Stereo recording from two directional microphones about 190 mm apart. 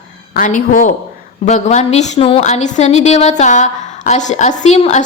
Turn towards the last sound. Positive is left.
turn(degrees=35)  # may be behind; listen again after turning